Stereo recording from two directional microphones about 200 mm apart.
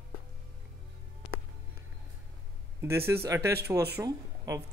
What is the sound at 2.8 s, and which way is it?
Speech, 10° right (ahead or behind).